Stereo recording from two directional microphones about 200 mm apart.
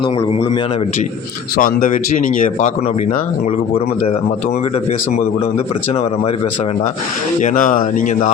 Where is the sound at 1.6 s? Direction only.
40° left (ahead or behind).